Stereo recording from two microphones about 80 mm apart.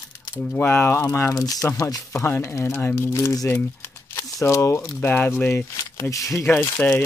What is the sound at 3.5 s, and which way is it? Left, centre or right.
Crumpling, left.